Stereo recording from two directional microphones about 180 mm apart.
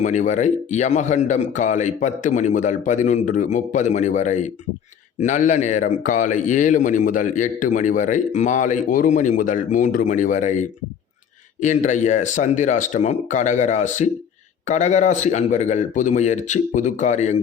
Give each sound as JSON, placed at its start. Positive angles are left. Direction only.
{"t": 0.0, "sound": "a man's voice", "side_deg": 45}